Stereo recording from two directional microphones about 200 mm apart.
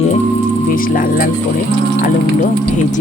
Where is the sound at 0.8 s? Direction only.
45° left (ahead or behind).